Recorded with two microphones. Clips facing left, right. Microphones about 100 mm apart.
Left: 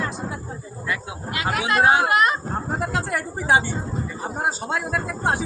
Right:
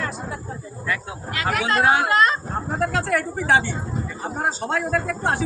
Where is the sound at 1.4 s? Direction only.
20° left (ahead or behind).